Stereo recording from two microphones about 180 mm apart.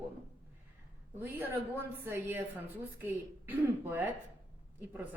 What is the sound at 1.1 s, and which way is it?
A woman's voice, 15° right (ahead or behind).